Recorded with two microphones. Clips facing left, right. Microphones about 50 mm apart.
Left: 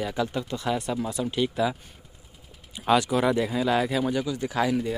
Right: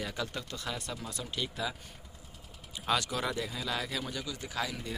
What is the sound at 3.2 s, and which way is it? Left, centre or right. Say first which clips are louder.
Speech: left 11 dB; left.